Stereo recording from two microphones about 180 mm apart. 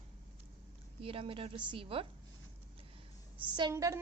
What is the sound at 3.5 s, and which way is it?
Speech, 20° right (ahead or behind).